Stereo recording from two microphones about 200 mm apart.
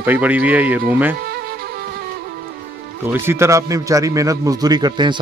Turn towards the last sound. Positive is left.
turn(degrees=-25)  # may be behind; listen again after turning